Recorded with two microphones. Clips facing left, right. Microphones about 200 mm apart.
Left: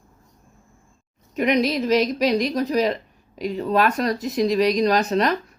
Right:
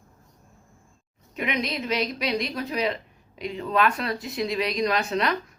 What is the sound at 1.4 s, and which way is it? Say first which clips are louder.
Speech: left 8 dB; 40° left (ahead or behind).